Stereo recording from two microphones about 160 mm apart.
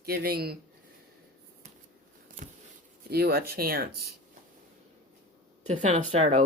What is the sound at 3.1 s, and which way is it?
Speech, 75° right (ahead or behind).